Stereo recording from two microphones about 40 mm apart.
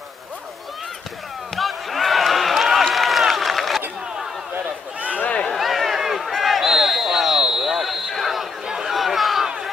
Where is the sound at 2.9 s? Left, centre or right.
Centre.